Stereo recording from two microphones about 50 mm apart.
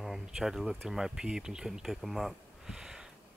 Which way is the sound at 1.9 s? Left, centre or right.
Centre.